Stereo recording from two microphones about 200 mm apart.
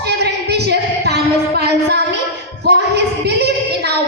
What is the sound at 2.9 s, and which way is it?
Female singing, 55° right (ahead or behind).